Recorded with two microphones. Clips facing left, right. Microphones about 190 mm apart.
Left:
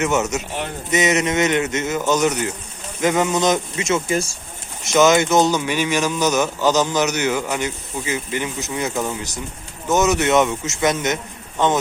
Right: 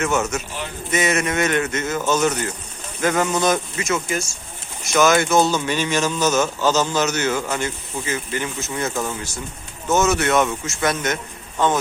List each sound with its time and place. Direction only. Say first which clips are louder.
0.0 s a man's voice: left 2 dB; 20° left (ahead or behind)